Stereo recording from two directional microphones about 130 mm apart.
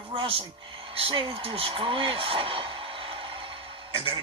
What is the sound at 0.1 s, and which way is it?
Speech, 45° right (ahead or behind).